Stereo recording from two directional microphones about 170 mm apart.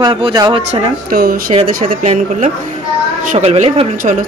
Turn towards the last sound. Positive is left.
turn(degrees=-45)  # may be behind; listen again after turning